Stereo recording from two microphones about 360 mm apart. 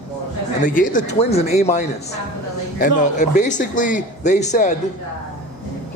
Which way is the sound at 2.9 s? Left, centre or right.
Left.